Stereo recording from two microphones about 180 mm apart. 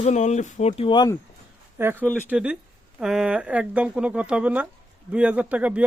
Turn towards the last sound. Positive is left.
turn(degrees=-10)  # may be behind; listen again after turning